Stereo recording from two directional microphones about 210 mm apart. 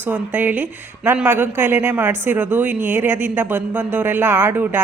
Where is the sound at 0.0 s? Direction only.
10° right (ahead or behind).